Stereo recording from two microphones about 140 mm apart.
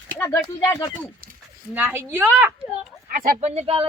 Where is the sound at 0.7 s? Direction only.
25° left (ahead or behind).